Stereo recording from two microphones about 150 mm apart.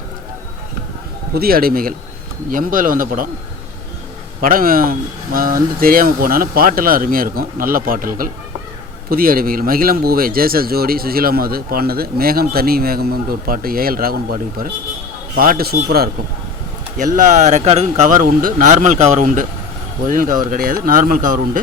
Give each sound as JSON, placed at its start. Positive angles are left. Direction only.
{"t": 1.3, "sound": "speech", "side_deg": -90}
{"t": 2.5, "sound": "speech", "side_deg": -65}
{"t": 4.4, "sound": "a man's voice", "side_deg": -70}
{"t": 17.0, "sound": "speech", "side_deg": -55}